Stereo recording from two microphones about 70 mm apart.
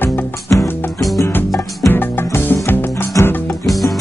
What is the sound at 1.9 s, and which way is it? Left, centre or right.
Music, left.